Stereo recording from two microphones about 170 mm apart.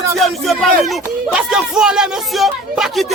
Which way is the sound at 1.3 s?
5° right (ahead or behind).